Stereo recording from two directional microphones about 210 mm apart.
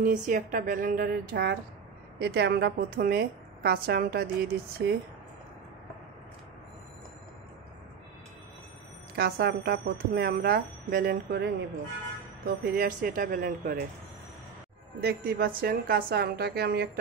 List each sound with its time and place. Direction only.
0.0 s speech: 40° right (ahead or behind)
9.1 s speech: 50° right (ahead or behind)
15.0 s speech: 50° right (ahead or behind)